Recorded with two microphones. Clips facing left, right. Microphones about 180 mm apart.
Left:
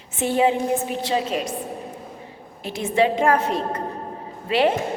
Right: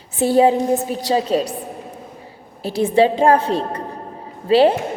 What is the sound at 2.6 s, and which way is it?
A woman's voice, 35° right (ahead or behind).